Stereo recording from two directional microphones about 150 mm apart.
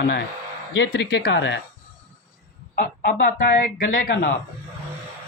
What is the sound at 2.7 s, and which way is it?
Speech, 65° left (ahead or behind).